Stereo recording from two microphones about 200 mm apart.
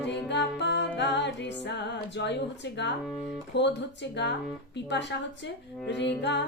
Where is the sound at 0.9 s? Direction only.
60° left (ahead or behind).